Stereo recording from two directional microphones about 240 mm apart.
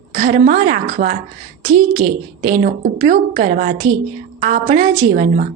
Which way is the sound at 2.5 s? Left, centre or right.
Right.